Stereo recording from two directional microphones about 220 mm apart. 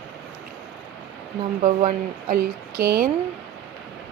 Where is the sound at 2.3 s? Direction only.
45° right (ahead or behind).